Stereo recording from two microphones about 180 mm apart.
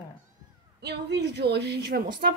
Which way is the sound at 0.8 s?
70° right (ahead or behind).